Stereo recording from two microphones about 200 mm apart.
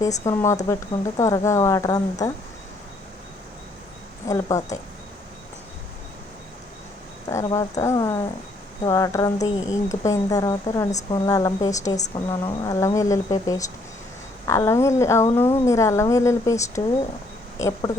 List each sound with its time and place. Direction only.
0.0 s speech: 15° left (ahead or behind)
4.3 s speech: 15° left (ahead or behind)
7.3 s speech: 15° left (ahead or behind)